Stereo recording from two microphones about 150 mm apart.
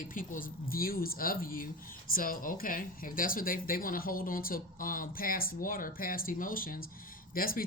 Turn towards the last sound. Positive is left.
turn(degrees=75)  # may be behind; listen again after turning